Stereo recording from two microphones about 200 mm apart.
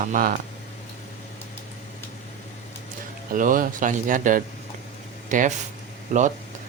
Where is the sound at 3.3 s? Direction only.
40° right (ahead or behind).